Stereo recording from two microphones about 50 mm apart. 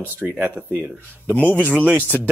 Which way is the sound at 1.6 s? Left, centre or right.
Right.